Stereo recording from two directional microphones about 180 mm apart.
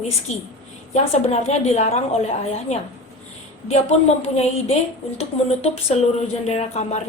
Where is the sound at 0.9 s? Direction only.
40° left (ahead or behind).